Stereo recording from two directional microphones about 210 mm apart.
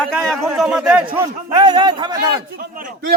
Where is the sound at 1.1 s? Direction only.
15° right (ahead or behind).